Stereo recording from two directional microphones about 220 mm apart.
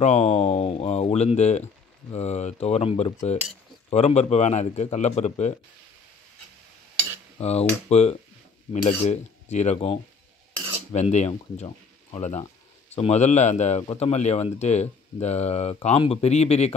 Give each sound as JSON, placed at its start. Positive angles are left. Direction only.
{"t": 0.0, "sound": "a man's voice", "side_deg": 30}
{"t": 7.3, "sound": "a man's voice", "side_deg": 30}